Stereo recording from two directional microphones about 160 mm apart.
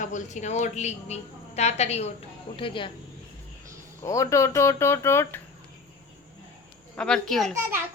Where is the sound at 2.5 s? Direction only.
30° left (ahead or behind).